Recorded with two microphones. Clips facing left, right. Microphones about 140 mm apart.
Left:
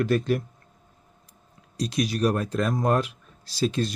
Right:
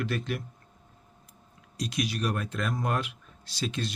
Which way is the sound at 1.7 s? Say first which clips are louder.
Left 5 dB; 35° left (ahead or behind).